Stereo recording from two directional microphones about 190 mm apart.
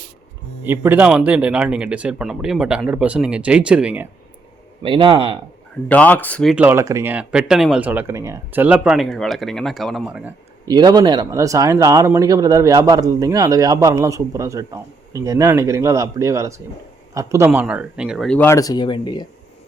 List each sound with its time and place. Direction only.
0.6 s speech: 10° right (ahead or behind)
4.8 s speech: 25° right (ahead or behind)
5.9 s speech: 10° left (ahead or behind)
10.7 s speech: 20° right (ahead or behind); by 19.2 s 25° left (ahead or behind)